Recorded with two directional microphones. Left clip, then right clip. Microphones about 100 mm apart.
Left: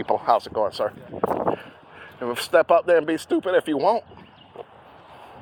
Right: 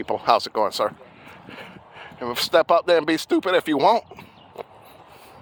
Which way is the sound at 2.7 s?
75° right (ahead or behind).